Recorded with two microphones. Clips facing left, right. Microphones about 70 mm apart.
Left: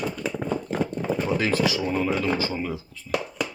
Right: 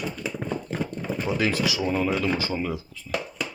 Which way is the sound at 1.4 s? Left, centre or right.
Left.